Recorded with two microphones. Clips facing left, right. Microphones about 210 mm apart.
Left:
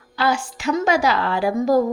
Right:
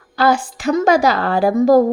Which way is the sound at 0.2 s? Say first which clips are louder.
Right 5 dB; 50° right (ahead or behind).